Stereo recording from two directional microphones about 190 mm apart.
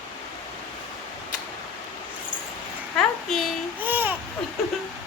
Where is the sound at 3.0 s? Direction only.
Centre (ahead or behind).